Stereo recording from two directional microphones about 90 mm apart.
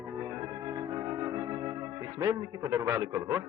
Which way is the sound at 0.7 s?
40° right (ahead or behind).